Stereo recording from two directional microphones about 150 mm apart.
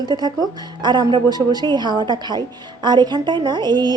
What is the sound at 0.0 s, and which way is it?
A woman's voice, 30° right (ahead or behind).